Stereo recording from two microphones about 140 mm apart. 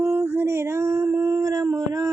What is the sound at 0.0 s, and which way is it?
Dog, 15° right (ahead or behind).